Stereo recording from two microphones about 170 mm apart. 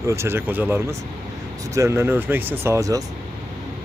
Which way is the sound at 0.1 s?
15° right (ahead or behind).